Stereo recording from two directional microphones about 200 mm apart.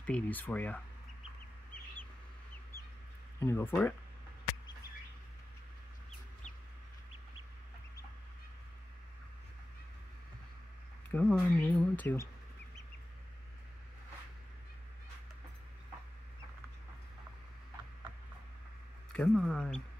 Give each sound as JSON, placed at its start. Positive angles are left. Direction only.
{"t": 0.0, "sound": "speech", "side_deg": 5}
{"t": 3.3, "sound": "speech", "side_deg": 10}
{"t": 11.1, "sound": "speech", "side_deg": 10}
{"t": 19.1, "sound": "speech", "side_deg": 0}